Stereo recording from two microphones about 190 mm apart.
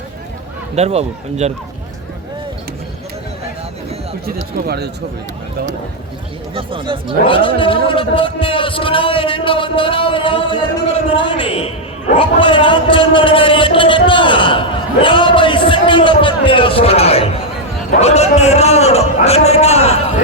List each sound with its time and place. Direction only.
0.8 s speech: 35° right (ahead or behind)
4.3 s speech: 55° right (ahead or behind)
6.5 s speech: 30° right (ahead or behind)
7.3 s a man's voice: 25° left (ahead or behind)